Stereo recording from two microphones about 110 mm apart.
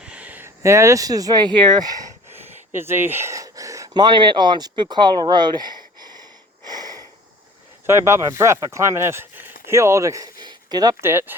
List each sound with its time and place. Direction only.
0.0 s speech: 10° right (ahead or behind); by 2.1 s 35° right (ahead or behind)
2.3 s a sound: 20° right (ahead or behind); by 4.7 s 40° right (ahead or behind)
4.9 s speech: 40° right (ahead or behind)
6.7 s sniff: 35° right (ahead or behind)
7.9 s speech: 25° right (ahead or behind)
11.0 s speech: 20° right (ahead or behind)